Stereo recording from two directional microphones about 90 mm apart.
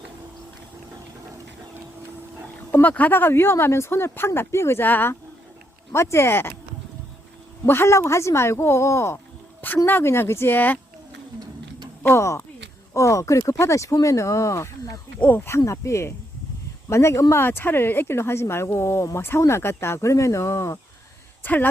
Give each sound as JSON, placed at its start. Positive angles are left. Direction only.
{"t": 2.8, "sound": "speech", "side_deg": 20}
{"t": 7.6, "sound": "speech", "side_deg": 30}
{"t": 12.0, "sound": "speech", "side_deg": 30}
{"t": 15.2, "sound": "speech", "side_deg": 20}
{"t": 21.4, "sound": "speech", "side_deg": 20}